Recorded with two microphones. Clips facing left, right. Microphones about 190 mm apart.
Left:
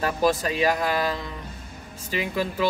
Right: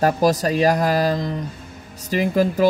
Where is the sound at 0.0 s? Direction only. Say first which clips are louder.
Right 5 dB; 40° right (ahead or behind).